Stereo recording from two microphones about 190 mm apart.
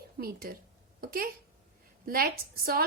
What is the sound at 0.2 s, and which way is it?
A woman's voice, 50° right (ahead or behind).